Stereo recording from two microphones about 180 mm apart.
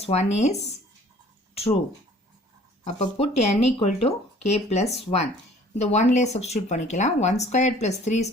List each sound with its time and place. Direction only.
0.0 s speech: 40° left (ahead or behind)
2.8 s speech: 40° left (ahead or behind)